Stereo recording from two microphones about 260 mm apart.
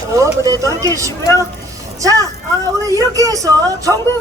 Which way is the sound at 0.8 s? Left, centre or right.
Centre.